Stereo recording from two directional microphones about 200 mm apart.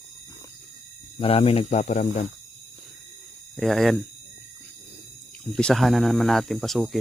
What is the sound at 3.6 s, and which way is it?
Speech, centre (ahead or behind).